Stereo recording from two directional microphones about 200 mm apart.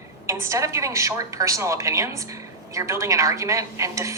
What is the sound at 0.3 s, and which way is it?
A woman's voice, 15° right (ahead or behind).